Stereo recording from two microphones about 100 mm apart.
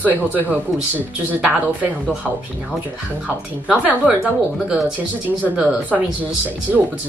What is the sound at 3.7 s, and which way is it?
Speech, 15° right (ahead or behind).